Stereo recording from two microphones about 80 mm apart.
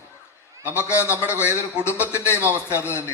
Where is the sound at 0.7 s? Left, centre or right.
Left.